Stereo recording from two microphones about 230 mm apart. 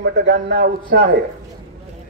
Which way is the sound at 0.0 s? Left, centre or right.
Right.